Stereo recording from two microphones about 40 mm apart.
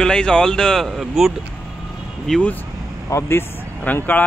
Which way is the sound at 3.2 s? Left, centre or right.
Left.